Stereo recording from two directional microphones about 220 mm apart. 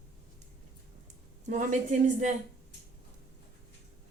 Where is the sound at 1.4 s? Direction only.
35° right (ahead or behind).